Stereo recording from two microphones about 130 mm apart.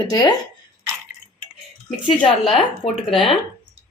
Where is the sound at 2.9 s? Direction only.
40° left (ahead or behind).